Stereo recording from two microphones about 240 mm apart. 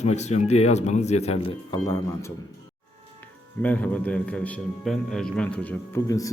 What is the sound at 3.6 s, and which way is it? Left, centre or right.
A man's voice, centre.